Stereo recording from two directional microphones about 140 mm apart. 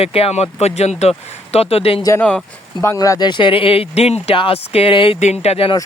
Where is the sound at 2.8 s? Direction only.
20° left (ahead or behind); by 5.2 s 40° left (ahead or behind).